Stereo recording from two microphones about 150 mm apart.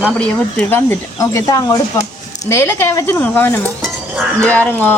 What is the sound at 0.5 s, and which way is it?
A woman's voice, 15° left (ahead or behind).